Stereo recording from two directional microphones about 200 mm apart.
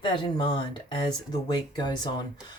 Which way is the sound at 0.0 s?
25° left (ahead or behind).